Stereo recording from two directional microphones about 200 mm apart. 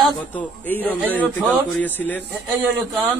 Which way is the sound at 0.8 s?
10° left (ahead or behind).